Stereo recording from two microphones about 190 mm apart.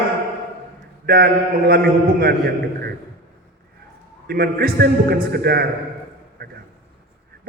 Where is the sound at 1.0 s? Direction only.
55° right (ahead or behind).